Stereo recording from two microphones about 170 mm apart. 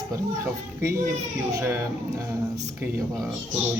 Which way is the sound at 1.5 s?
15° right (ahead or behind).